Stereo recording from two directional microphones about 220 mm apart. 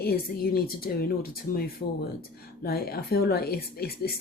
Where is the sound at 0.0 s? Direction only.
45° left (ahead or behind).